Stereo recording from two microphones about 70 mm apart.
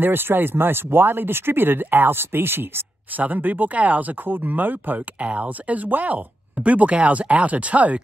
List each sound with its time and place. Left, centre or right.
0.0 s speech: right